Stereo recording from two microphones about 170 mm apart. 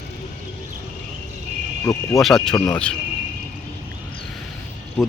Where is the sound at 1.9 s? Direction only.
20° left (ahead or behind).